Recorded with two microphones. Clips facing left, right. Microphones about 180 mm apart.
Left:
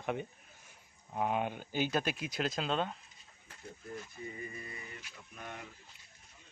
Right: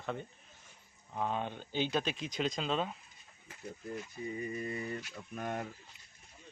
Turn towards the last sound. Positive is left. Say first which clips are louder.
# right 9 dB
turn(degrees=-50)  # may be behind; listen again after turning